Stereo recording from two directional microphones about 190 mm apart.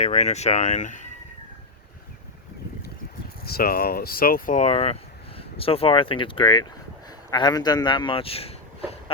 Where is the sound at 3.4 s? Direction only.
55° left (ahead or behind); by 8.5 s 30° left (ahead or behind).